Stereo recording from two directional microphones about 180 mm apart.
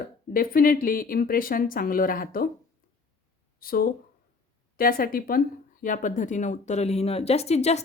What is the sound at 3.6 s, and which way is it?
A woman's voice, 55° left (ahead or behind).